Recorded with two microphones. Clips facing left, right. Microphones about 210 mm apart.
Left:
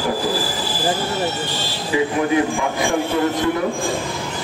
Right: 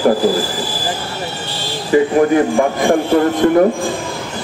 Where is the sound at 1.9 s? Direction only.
50° right (ahead or behind).